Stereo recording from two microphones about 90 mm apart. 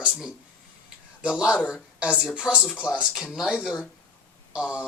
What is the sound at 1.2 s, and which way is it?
A woman's voice, 15° right (ahead or behind).